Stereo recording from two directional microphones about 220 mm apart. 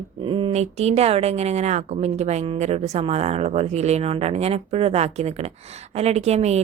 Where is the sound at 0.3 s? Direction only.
25° right (ahead or behind).